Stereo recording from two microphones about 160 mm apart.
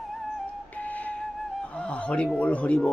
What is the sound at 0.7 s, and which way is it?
Flute, 10° left (ahead or behind).